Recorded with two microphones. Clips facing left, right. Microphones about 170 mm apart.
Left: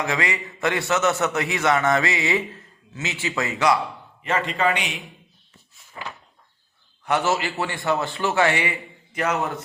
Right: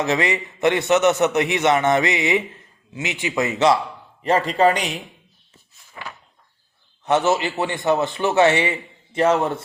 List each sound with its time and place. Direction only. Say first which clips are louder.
0.0 s a man's voice: right 4 dB; 25° right (ahead or behind)
4.2 s a man's voice: right 6 dB; 35° right (ahead or behind)
7.0 s a man's voice: right 4 dB; 20° right (ahead or behind)